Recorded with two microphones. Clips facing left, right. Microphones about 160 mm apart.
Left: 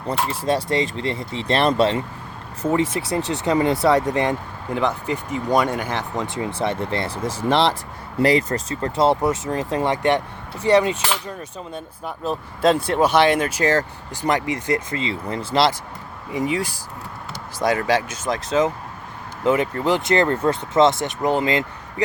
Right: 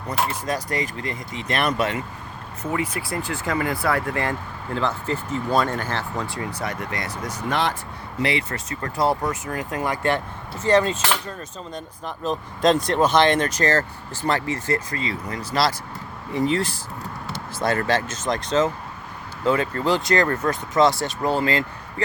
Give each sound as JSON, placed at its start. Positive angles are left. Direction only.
{"t": 0.1, "sound": "speech", "side_deg": 30}
{"t": 8.2, "sound": "speech", "side_deg": 40}
{"t": 8.7, "sound": "speech", "side_deg": 25}
{"t": 16.3, "sound": "speech", "side_deg": 10}
{"t": 19.5, "sound": "speech", "side_deg": 20}